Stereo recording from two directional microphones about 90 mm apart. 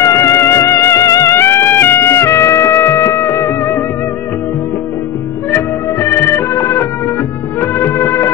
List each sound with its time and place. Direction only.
0.0 s music: 35° left (ahead or behind)
5.5 s music: 30° left (ahead or behind)